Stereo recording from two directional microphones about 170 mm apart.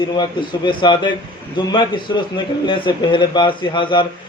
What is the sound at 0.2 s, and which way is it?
A man's voice, 30° left (ahead or behind).